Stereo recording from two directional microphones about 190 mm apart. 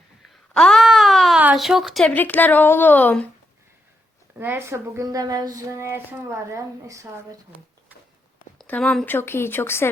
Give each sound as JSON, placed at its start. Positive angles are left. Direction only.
{"t": 0.5, "sound": "speech", "side_deg": 5}
{"t": 4.4, "sound": "speech", "side_deg": -10}
{"t": 8.5, "sound": "speech", "side_deg": 5}